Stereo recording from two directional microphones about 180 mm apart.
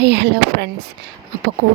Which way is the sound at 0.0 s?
70° right (ahead or behind).